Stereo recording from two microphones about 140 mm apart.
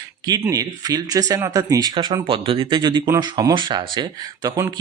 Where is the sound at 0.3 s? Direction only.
25° right (ahead or behind).